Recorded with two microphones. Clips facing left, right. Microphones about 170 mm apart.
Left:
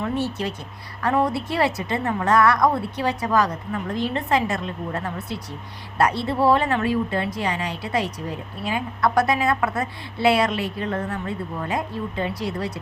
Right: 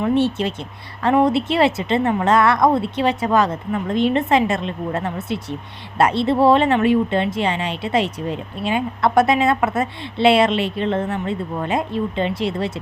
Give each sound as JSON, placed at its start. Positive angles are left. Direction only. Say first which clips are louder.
{"t": 0.0, "sound": "speech", "louder": "right 7 dB", "side_deg": -25}